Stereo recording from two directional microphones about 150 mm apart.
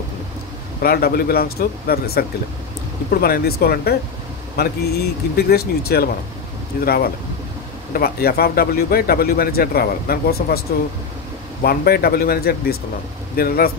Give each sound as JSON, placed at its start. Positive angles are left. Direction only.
{"t": 0.8, "sound": "speech", "side_deg": 90}
{"t": 11.6, "sound": "speech", "side_deg": 90}